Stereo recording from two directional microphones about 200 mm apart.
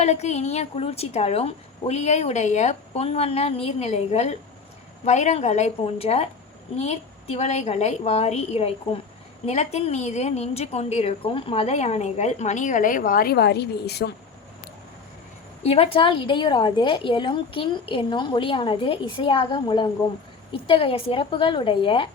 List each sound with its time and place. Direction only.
0.0 s a woman's voice: 35° left (ahead or behind); by 14.1 s 55° left (ahead or behind)
15.6 s a woman's voice: 30° left (ahead or behind)